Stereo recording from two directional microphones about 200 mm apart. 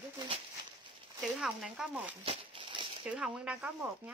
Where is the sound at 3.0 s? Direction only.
5° right (ahead or behind).